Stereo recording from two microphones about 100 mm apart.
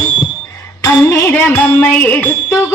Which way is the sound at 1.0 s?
25° left (ahead or behind).